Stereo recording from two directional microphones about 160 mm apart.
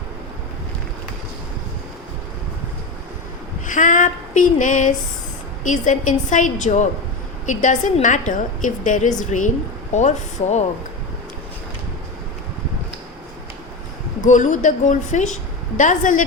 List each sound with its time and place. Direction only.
3.7 s female singing: 50° left (ahead or behind)
5.6 s a woman's voice: 50° left (ahead or behind)
14.3 s a woman's voice: 50° left (ahead or behind)